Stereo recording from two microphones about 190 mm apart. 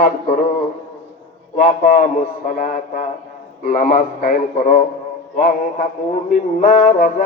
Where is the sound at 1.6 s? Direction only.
45° left (ahead or behind).